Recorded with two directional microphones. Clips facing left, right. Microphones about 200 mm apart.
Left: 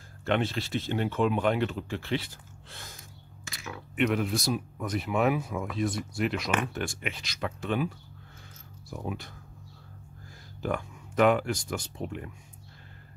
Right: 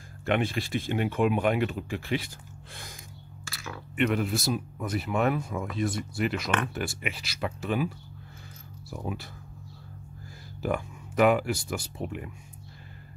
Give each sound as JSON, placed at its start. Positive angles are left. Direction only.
{"t": 0.2, "sound": "speech", "side_deg": -15}
{"t": 3.4, "sound": "a sound", "side_deg": 20}
{"t": 3.9, "sound": "speech", "side_deg": 0}
{"t": 8.9, "sound": "speech", "side_deg": 0}
{"t": 10.6, "sound": "speech", "side_deg": -5}